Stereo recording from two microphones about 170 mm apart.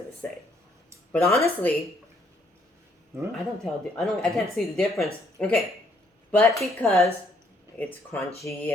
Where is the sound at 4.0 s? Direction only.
5° left (ahead or behind).